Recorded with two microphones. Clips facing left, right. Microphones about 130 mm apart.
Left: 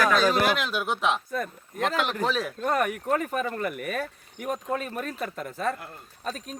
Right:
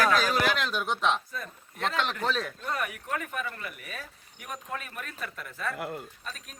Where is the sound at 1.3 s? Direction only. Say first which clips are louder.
Left 9 dB; 50° left (ahead or behind).